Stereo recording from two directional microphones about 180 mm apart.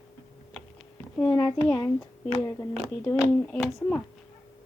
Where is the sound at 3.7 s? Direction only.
10° left (ahead or behind).